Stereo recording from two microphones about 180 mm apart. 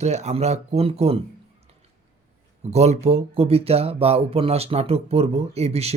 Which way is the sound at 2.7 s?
35° right (ahead or behind).